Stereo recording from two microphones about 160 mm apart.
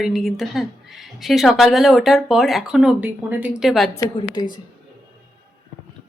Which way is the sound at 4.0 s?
30° left (ahead or behind).